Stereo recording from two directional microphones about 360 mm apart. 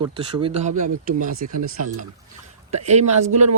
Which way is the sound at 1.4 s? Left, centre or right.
Right.